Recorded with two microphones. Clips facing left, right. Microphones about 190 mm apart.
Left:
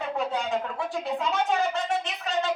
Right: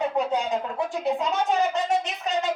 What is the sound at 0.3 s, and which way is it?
Speech, 20° right (ahead or behind).